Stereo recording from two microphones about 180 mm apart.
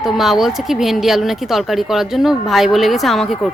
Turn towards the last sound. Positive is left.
turn(degrees=0)  # may be behind; listen again after turning